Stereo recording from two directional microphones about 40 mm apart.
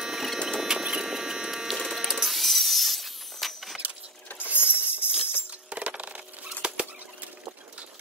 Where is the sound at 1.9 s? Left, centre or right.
Centre.